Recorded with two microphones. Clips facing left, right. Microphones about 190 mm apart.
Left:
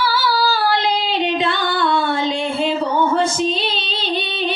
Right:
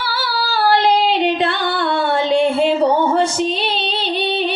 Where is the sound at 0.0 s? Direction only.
60° right (ahead or behind).